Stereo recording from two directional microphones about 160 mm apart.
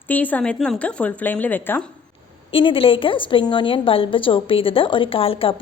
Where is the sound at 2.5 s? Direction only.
35° left (ahead or behind).